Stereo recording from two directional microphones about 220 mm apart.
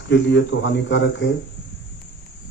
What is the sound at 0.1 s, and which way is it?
Speech, 55° left (ahead or behind).